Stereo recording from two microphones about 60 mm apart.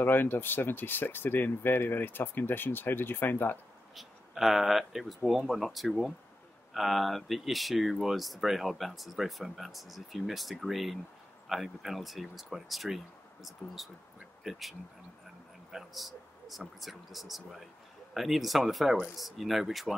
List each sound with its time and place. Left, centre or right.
0.0 s speech: left
3.9 s speech: centre